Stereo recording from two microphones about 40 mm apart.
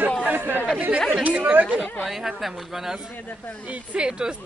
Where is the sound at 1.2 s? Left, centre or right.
Right.